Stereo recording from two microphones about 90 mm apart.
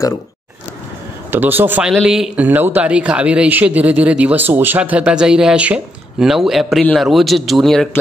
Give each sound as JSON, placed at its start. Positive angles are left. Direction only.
{"t": 1.3, "sound": "speech", "side_deg": -20}
{"t": 2.0, "sound": "a man's voice", "side_deg": -5}
{"t": 2.3, "sound": "a man's voice", "side_deg": -20}